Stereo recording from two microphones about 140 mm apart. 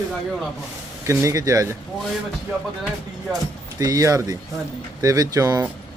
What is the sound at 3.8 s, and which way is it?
Speech, 25° right (ahead or behind).